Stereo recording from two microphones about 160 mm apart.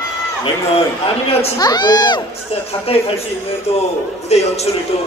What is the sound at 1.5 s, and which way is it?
Speech, 25° left (ahead or behind).